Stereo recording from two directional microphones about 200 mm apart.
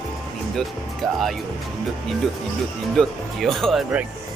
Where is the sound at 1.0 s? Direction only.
Centre (ahead or behind).